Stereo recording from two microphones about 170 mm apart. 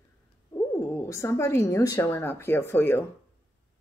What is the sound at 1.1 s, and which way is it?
Speech, 15° left (ahead or behind).